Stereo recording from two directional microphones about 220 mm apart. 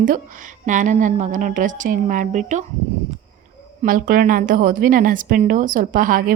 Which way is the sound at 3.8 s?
40° right (ahead or behind).